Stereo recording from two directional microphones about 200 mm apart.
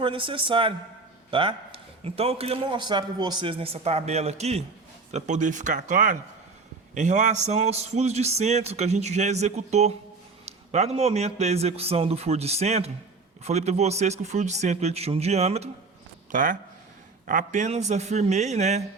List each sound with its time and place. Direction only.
0.0 s a man's voice: 25° right (ahead or behind)
16.3 s a man's voice: 40° right (ahead or behind)